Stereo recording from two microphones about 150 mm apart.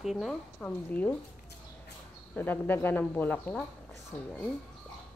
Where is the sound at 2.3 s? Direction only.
15° left (ahead or behind).